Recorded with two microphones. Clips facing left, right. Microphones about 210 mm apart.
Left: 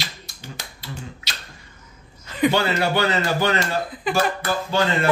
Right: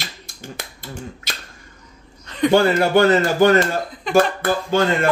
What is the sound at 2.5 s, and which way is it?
Speech, 50° right (ahead or behind).